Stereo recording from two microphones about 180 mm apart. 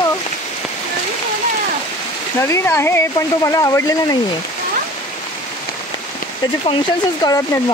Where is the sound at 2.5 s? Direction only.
15° left (ahead or behind).